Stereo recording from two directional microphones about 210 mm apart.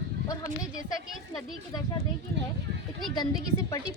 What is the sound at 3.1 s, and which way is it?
Speech, 20° left (ahead or behind).